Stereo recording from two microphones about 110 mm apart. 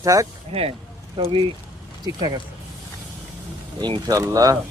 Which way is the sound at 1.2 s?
55° right (ahead or behind).